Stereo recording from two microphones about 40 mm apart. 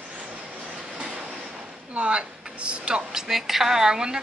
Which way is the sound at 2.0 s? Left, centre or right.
Right.